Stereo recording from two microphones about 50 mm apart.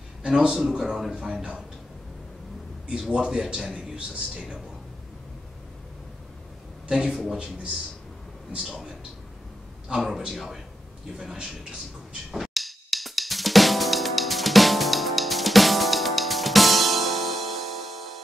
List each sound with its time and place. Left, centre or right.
0.2 s a sound: centre
0.5 s speech: centre
3.1 s speech: centre
6.9 s a man's voice: centre
10.3 s speech: centre
11.1 s speech: centre
12.3 s drum kit: centre